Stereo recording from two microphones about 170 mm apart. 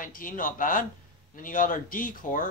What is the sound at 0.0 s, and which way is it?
Speech, 55° left (ahead or behind).